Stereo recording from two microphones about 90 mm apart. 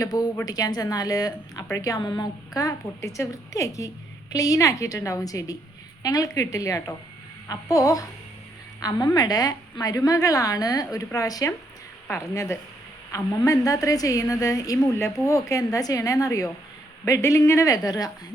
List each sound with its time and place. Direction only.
0.0 s a woman's voice: 45° left (ahead or behind)
14.9 s a woman's voice: 30° left (ahead or behind); by 18.1 s 45° left (ahead or behind)